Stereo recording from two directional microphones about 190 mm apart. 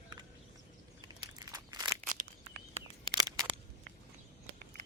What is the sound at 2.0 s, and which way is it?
Crunch, 45° right (ahead or behind).